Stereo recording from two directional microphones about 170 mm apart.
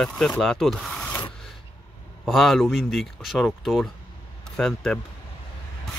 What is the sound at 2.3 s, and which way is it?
Speech, centre (ahead or behind).